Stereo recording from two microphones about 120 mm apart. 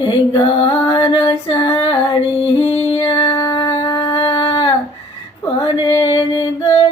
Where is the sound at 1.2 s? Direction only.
30° left (ahead or behind).